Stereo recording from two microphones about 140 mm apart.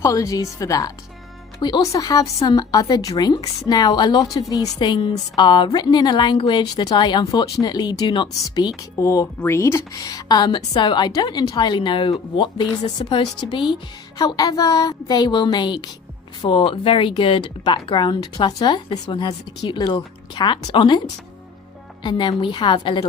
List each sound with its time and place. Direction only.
0.0 s a woman's voice: 25° left (ahead or behind)
22.0 s a woman's voice: 35° left (ahead or behind)